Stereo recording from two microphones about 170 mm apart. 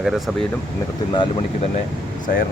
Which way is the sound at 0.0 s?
Centre (ahead or behind).